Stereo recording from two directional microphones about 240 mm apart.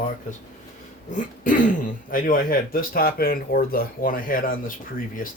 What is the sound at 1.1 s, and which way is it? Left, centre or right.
Speech, left.